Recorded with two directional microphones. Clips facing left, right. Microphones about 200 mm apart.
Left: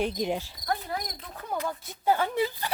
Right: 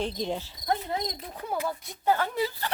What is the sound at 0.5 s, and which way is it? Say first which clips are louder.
Speech: right 2 dB; 20° right (ahead or behind).